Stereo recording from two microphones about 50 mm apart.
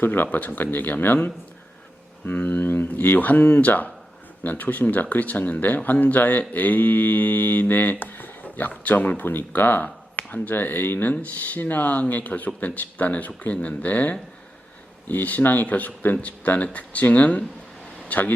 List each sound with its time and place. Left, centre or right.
0.0 s speech: left
9.8 s speech: left
18.1 s speech: left